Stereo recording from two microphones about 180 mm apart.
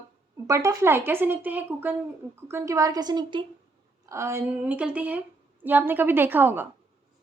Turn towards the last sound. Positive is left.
turn(degrees=-10)  # may be behind; listen again after turning